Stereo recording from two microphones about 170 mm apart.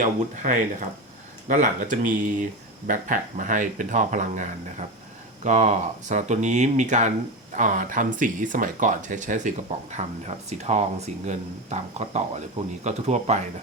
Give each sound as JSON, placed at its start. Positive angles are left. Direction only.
{"t": 0.0, "sound": "speech", "side_deg": -45}